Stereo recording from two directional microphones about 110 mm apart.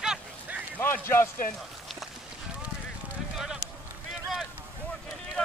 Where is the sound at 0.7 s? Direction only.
20° left (ahead or behind).